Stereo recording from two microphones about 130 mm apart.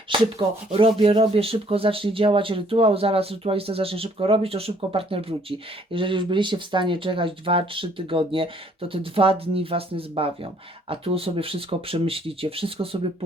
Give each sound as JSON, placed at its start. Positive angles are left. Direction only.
{"t": 0.1, "sound": "speech", "side_deg": -40}